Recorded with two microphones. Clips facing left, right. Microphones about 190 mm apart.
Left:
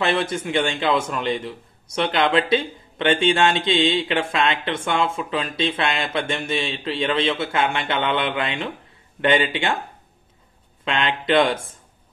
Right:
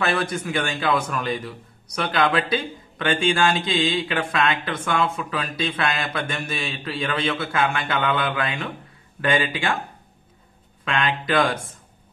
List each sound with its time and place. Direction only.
0.0 s a man's voice: 25° left (ahead or behind)
10.9 s a man's voice: 25° left (ahead or behind)